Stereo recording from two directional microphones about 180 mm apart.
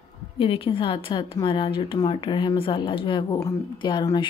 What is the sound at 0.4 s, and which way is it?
Speech, 30° left (ahead or behind).